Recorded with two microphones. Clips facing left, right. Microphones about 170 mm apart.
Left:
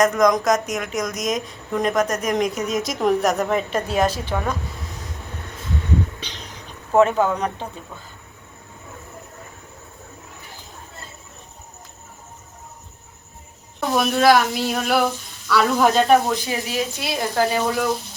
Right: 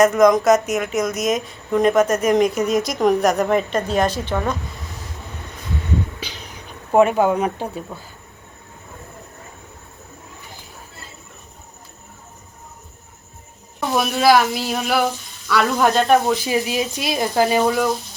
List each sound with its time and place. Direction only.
0.0 s a woman's voice: 5° right (ahead or behind)
6.1 s a sound: 5° right (ahead or behind)
13.9 s a woman's voice: 5° right (ahead or behind)
16.5 s speech: 15° right (ahead or behind)